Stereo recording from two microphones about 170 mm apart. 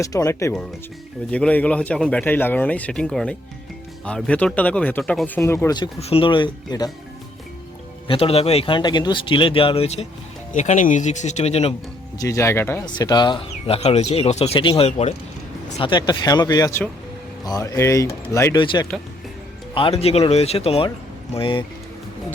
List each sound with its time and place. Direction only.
0.0 s speech: 20° left (ahead or behind)
1.3 s speech: 5° left (ahead or behind)
6.0 s speech: 35° left (ahead or behind)
8.0 s speech: 30° left (ahead or behind)
12.1 s speech: 20° left (ahead or behind)
12.8 s speech: 25° left (ahead or behind)
15.8 s speech: 25° left (ahead or behind)
18.6 s speech: 30° left (ahead or behind)